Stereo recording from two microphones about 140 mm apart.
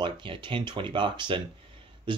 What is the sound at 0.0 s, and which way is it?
Speech, 35° right (ahead or behind).